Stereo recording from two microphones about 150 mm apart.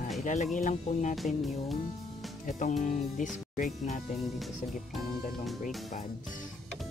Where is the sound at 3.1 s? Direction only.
55° left (ahead or behind).